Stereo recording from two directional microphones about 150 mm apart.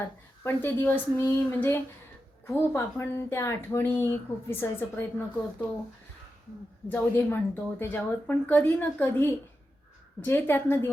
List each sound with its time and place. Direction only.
0.4 s speech: 15° left (ahead or behind)
6.8 s speech: 15° left (ahead or behind)